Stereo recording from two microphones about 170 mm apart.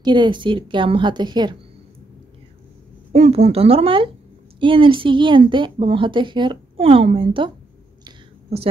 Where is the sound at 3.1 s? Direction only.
35° right (ahead or behind).